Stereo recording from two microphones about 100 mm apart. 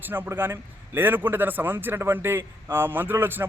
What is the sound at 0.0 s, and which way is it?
A man's voice, 20° right (ahead or behind).